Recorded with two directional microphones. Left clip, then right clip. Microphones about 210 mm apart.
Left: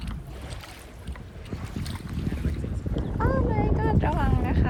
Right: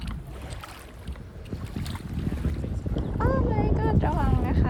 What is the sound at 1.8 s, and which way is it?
Boat, centre (ahead or behind).